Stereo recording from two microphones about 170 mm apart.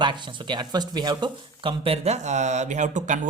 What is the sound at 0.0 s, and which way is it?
Speech, 25° right (ahead or behind).